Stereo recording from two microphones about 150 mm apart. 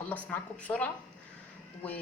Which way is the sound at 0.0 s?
10° left (ahead or behind).